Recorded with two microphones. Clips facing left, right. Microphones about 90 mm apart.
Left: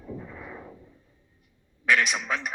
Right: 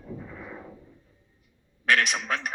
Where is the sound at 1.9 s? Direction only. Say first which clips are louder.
Even; 55° right (ahead or behind).